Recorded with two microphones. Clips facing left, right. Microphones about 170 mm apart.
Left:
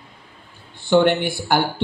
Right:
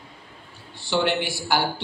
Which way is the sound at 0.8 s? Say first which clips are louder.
Left 7 dB; 55° left (ahead or behind).